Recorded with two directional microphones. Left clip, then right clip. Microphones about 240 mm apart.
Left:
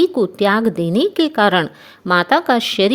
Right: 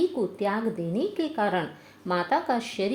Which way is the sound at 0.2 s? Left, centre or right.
Left.